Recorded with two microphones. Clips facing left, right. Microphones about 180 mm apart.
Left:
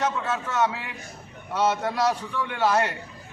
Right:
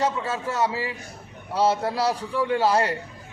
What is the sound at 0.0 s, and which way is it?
A man's voice, 30° right (ahead or behind).